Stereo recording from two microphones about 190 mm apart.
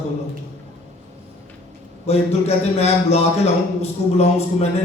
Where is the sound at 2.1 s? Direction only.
35° left (ahead or behind).